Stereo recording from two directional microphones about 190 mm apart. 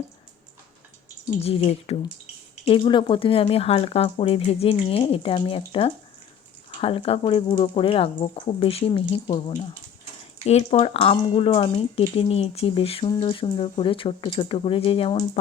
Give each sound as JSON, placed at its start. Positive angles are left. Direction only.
{"t": 1.4, "sound": "speech", "side_deg": 30}